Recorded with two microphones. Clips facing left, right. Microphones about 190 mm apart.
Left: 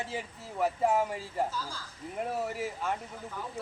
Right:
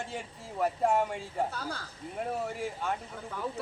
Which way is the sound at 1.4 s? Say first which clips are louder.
Right 1 dB; 65° right (ahead or behind).